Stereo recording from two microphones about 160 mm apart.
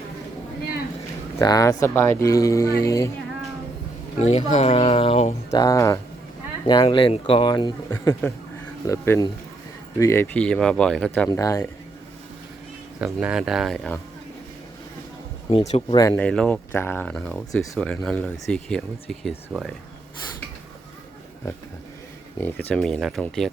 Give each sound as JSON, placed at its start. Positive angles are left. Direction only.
{"t": 1.4, "sound": "speech", "side_deg": 25}
{"t": 4.3, "sound": "speech", "side_deg": 45}
{"t": 5.5, "sound": "speech", "side_deg": 20}
{"t": 11.3, "sound": "speech", "side_deg": 20}
{"t": 13.0, "sound": "speech", "side_deg": -5}
{"t": 15.4, "sound": "speech", "side_deg": 40}
{"t": 16.1, "sound": "speech", "side_deg": 5}
{"t": 22.7, "sound": "speech", "side_deg": 0}